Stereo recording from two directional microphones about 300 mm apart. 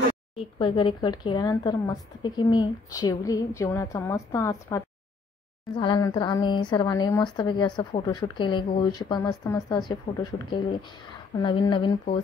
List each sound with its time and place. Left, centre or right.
0.6 s a woman's voice: centre